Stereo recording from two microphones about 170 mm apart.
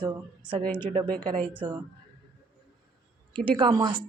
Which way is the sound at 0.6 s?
10° left (ahead or behind).